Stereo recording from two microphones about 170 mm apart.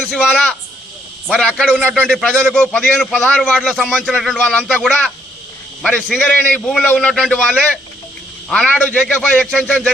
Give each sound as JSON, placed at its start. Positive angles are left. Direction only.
{"t": 0.0, "sound": "a man's voice", "side_deg": 0}
{"t": 1.6, "sound": "speech", "side_deg": -5}
{"t": 2.0, "sound": "a man's voice", "side_deg": 5}
{"t": 8.4, "sound": "a man's voice", "side_deg": 5}